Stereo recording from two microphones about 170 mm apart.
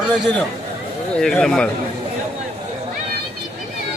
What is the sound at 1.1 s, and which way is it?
Speech, 5° left (ahead or behind).